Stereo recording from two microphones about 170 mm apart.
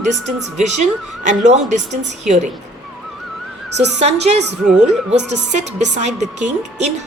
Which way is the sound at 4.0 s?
40° right (ahead or behind).